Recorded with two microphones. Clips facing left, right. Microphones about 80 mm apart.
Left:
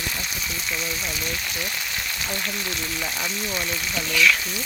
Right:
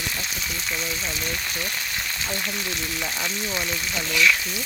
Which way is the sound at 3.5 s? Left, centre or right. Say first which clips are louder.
Even; centre.